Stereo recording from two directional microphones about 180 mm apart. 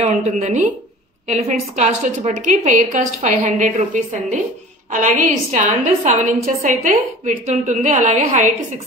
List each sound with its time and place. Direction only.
0.0 s a woman's voice: 40° right (ahead or behind)